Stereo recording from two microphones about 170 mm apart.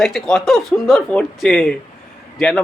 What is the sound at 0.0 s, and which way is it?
A man's voice, centre (ahead or behind).